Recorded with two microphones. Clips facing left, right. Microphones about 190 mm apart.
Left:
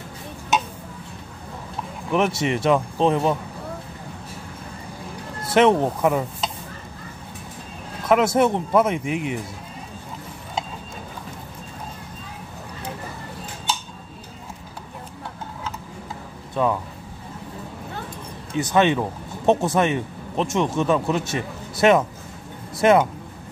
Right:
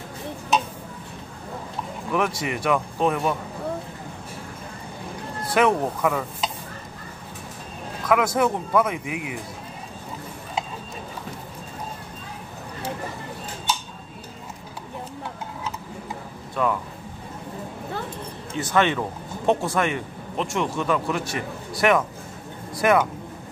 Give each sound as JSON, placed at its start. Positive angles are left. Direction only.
{"t": 2.1, "sound": "speech", "side_deg": 25}
{"t": 5.5, "sound": "speech", "side_deg": 25}
{"t": 8.1, "sound": "speech", "side_deg": 25}
{"t": 18.5, "sound": "speech", "side_deg": 15}